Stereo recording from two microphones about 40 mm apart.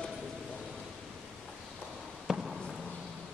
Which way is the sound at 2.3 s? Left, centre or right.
Centre.